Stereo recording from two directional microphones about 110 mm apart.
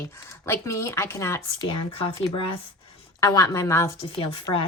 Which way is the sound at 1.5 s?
50° left (ahead or behind).